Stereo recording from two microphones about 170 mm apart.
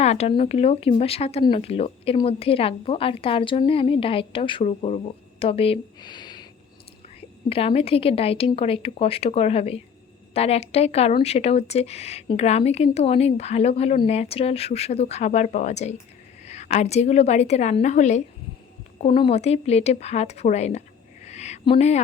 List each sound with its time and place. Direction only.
0.0 s speech: 40° left (ahead or behind)
7.5 s speech: 35° left (ahead or behind)
21.2 s a sound: 40° left (ahead or behind)